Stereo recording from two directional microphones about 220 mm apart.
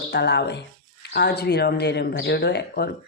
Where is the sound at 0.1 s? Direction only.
50° left (ahead or behind).